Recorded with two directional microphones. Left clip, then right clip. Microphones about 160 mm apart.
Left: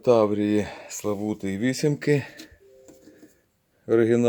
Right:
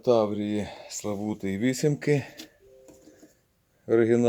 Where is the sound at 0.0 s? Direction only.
30° left (ahead or behind); by 2.4 s 10° left (ahead or behind).